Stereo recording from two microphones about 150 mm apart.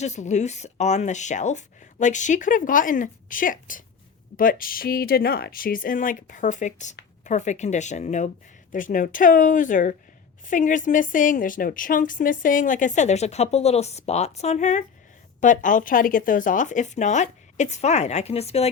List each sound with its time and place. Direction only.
0.0 s speech: 50° left (ahead or behind)